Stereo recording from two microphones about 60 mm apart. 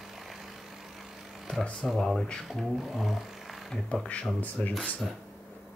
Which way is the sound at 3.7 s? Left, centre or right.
Centre.